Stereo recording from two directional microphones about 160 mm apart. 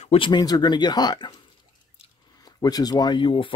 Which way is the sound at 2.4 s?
25° left (ahead or behind).